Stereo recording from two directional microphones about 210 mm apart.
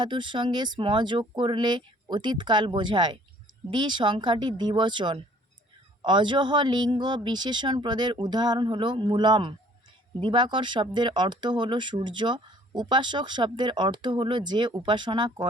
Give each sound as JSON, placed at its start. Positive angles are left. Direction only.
{"t": 0.0, "sound": "speech", "side_deg": -20}